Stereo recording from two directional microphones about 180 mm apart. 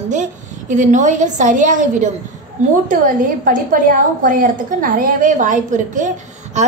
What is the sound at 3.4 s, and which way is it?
A woman's voice, 50° right (ahead or behind).